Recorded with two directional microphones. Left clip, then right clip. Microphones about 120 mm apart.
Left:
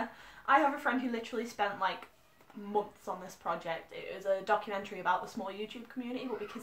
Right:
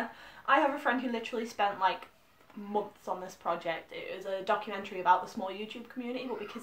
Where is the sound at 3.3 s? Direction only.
15° right (ahead or behind).